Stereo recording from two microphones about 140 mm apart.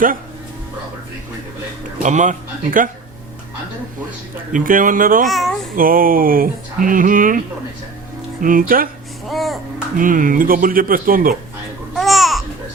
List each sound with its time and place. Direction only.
2.0 s speech: 60° right (ahead or behind)
4.5 s speech: 75° right (ahead or behind)
5.2 s a child's voice: centre (ahead or behind)
5.7 s speech: 90° right
9.2 s music: centre (ahead or behind)
10.0 s speech: 75° right (ahead or behind)
11.9 s babbling: centre (ahead or behind)